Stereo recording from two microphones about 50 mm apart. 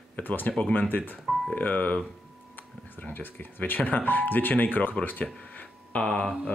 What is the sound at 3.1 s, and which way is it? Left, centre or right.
Speech, left.